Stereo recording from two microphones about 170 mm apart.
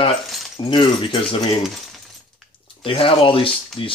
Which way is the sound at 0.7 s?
30° left (ahead or behind).